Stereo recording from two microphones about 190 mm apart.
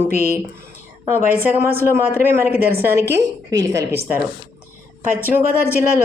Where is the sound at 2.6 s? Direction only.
55° right (ahead or behind).